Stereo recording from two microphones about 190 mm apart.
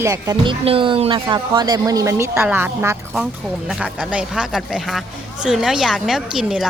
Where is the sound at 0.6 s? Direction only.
30° right (ahead or behind).